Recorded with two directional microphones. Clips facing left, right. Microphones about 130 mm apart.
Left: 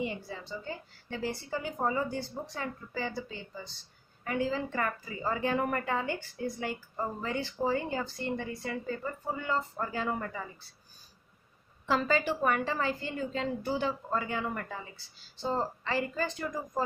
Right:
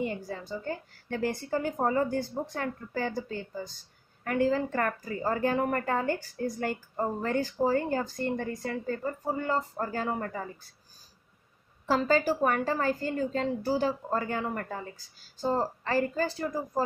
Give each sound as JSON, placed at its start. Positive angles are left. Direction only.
{"t": 0.0, "sound": "a woman's voice", "side_deg": -45}
{"t": 12.1, "sound": "a woman's voice", "side_deg": -40}